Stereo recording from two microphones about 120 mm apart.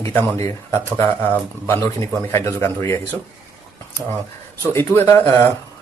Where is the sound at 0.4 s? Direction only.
20° left (ahead or behind).